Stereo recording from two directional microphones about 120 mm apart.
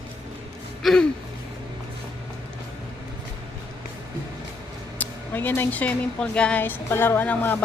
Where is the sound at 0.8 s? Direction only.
Centre (ahead or behind).